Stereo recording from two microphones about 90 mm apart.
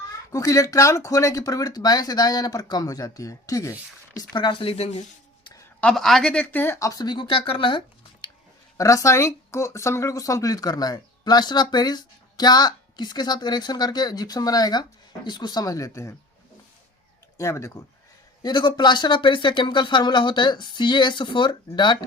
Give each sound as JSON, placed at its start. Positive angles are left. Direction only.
{"t": 0.3, "sound": "speech", "side_deg": 35}
{"t": 4.2, "sound": "speech", "side_deg": 50}
{"t": 5.8, "sound": "speech", "side_deg": 5}
{"t": 6.7, "sound": "speech", "side_deg": 40}
{"t": 8.8, "sound": "speech", "side_deg": 35}
{"t": 17.3, "sound": "speech", "side_deg": 35}
{"t": 18.4, "sound": "speech", "side_deg": 55}